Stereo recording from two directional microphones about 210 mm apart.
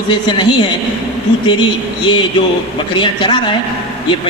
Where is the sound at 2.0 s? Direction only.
20° left (ahead or behind).